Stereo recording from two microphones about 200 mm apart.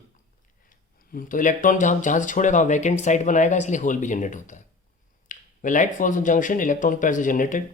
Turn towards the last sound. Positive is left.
turn(degrees=40)  # may be behind; listen again after turning